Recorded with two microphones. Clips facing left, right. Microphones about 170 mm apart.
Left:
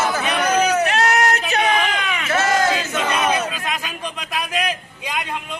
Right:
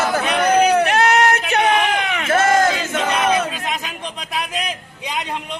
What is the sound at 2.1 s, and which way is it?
Battle cry, 50° right (ahead or behind).